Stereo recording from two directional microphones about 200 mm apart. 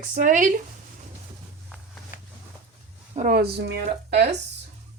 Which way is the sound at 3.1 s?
45° right (ahead or behind).